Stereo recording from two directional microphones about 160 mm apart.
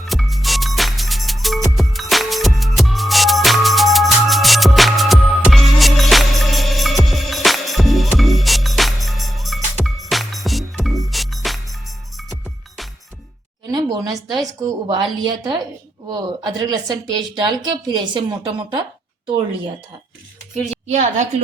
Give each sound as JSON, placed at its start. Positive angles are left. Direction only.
{"t": 0.0, "sound": "music", "side_deg": 0}
{"t": 13.7, "sound": "a sound", "side_deg": -25}
{"t": 14.4, "sound": "a woman's voice", "side_deg": -30}
{"t": 16.0, "sound": "a woman's voice", "side_deg": -25}
{"t": 20.8, "sound": "a woman's voice", "side_deg": -45}